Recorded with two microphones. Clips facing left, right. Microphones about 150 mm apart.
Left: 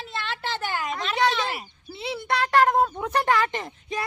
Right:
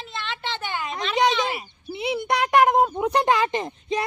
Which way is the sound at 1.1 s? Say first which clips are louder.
Right 3 dB; 15° right (ahead or behind).